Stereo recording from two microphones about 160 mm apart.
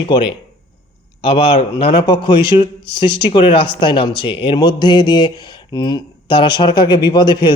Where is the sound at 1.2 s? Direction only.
35° left (ahead or behind).